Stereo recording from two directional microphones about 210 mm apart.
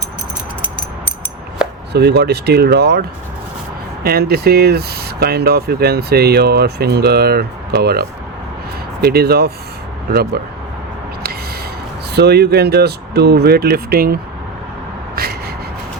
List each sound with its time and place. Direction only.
1.9 s speech: 50° right (ahead or behind)
4.0 s speech: 50° right (ahead or behind)
12.1 s speech: 50° right (ahead or behind)
15.1 s a sound: 50° right (ahead or behind)